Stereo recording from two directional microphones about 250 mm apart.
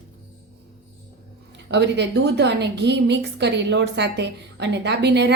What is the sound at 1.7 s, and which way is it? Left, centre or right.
A woman's voice, right.